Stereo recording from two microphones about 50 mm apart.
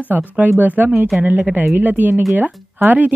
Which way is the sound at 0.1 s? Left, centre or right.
Right.